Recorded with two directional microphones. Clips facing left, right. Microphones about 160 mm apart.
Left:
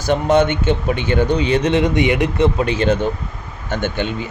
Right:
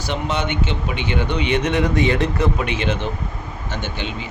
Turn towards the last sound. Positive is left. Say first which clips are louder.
# left 6 dB
turn(degrees=50)  # may be behind; listen again after turning